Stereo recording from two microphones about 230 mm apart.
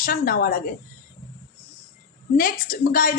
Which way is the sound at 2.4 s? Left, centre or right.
Left.